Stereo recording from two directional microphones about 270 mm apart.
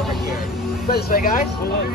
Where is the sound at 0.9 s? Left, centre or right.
Left.